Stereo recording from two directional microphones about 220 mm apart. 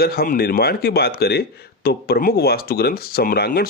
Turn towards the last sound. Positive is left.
turn(degrees=45)  # may be behind; listen again after turning